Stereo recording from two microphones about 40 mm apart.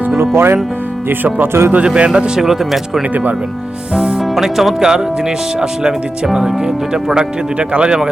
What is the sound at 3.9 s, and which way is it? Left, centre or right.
Speech, right.